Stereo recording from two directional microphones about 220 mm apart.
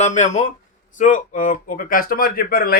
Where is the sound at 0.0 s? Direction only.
35° left (ahead or behind).